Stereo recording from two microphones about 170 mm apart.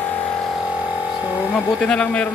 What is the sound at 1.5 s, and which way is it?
Speech, 5° left (ahead or behind).